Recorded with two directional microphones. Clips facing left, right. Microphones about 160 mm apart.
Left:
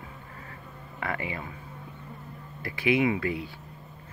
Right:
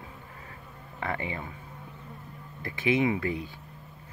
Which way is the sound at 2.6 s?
20° right (ahead or behind).